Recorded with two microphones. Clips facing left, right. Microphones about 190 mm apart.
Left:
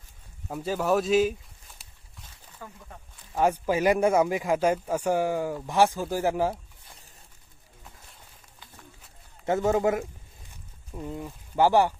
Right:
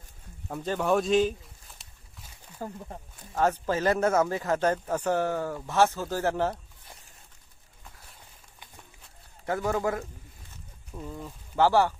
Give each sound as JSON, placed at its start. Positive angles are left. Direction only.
{"t": 0.5, "sound": "a sound", "side_deg": 5}
{"t": 2.6, "sound": "speech", "side_deg": -30}
{"t": 3.3, "sound": "speech", "side_deg": 10}
{"t": 9.5, "sound": "a man's voice", "side_deg": 20}